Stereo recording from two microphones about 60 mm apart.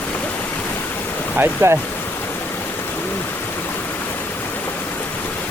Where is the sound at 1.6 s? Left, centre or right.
Right.